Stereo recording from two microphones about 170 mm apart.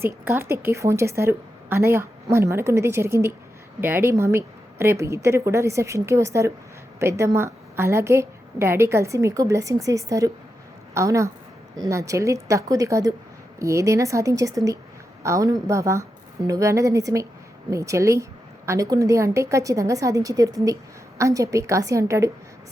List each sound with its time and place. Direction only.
0.0 s a woman's voice: 15° right (ahead or behind)